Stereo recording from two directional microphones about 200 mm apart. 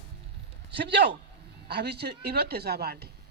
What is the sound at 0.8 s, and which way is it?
A man's voice, 60° right (ahead or behind).